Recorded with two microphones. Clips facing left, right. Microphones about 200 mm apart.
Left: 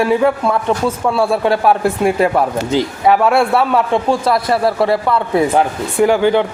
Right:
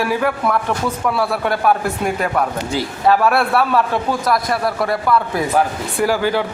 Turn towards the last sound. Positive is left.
turn(degrees=20)  # may be behind; listen again after turning